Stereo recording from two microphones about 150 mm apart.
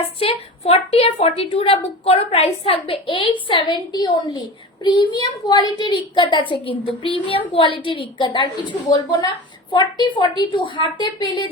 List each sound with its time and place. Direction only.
0.2 s a woman's voice: 40° left (ahead or behind)